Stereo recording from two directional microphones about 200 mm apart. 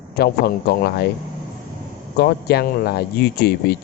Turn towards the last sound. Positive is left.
turn(degrees=55)  # may be behind; listen again after turning